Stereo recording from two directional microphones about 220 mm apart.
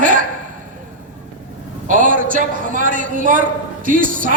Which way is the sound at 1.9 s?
35° right (ahead or behind).